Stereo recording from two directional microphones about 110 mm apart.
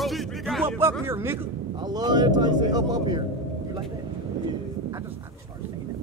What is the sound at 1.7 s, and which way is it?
A man's voice, 40° right (ahead or behind).